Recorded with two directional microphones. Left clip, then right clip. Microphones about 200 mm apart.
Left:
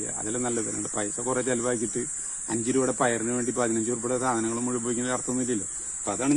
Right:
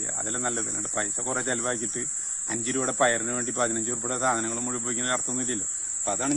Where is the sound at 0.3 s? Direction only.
30° right (ahead or behind).